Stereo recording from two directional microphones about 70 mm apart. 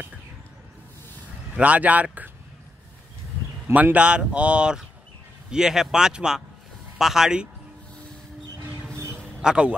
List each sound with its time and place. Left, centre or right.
1.6 s speech: right
3.6 s speech: right; by 7.4 s centre
9.4 s speech: centre